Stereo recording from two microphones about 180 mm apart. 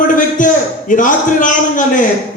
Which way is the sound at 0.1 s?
45° left (ahead or behind).